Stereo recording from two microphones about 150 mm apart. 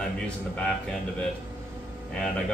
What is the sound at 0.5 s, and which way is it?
Speech, 5° left (ahead or behind).